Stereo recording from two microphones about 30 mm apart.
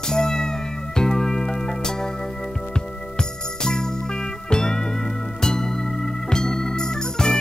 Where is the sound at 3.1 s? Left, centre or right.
Left.